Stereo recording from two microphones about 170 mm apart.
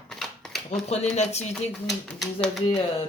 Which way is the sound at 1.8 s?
Centre (ahead or behind).